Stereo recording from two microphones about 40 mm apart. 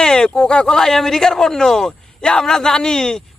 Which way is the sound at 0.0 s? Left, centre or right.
Centre.